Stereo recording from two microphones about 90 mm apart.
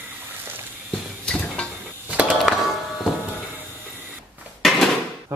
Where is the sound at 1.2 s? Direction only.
10° left (ahead or behind).